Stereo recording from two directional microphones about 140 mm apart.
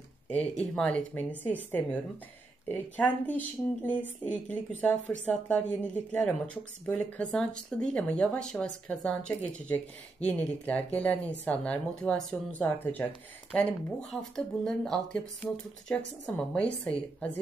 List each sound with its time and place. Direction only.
0.3 s speech: 10° left (ahead or behind)